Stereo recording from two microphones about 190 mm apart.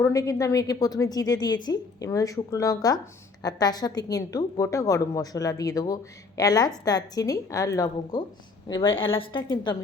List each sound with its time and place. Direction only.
0.0 s a woman's voice: 15° left (ahead or behind)